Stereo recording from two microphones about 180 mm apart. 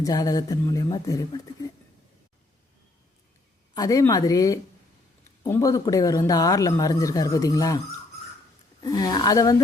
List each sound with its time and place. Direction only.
0.0 s speech: 20° left (ahead or behind)
3.8 s speech: 20° left (ahead or behind)
8.8 s speech: 20° left (ahead or behind)